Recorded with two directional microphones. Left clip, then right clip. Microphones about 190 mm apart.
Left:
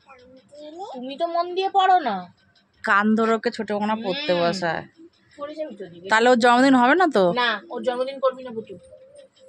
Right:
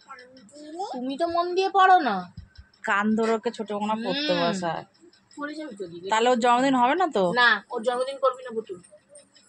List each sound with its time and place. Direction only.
1.0 s a woman's voice: centre (ahead or behind)
2.8 s speech: 25° left (ahead or behind)
4.1 s speech: 10° right (ahead or behind)
4.6 s speech: 35° left (ahead or behind)
6.0 s speech: 35° left (ahead or behind)
7.3 s a woman's voice: centre (ahead or behind)